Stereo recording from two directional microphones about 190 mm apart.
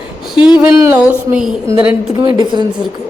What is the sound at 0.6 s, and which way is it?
Speech, 5° right (ahead or behind).